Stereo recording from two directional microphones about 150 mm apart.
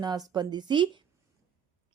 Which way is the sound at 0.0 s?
25° right (ahead or behind).